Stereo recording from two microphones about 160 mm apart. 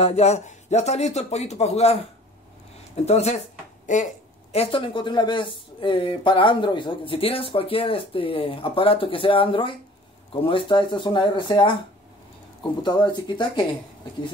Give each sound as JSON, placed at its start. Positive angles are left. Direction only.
{"t": 0.0, "sound": "speech", "side_deg": 40}
{"t": 3.1, "sound": "speech", "side_deg": 40}
{"t": 12.8, "sound": "speech", "side_deg": 25}